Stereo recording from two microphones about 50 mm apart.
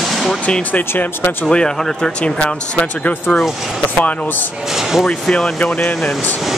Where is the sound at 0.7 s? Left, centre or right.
Left.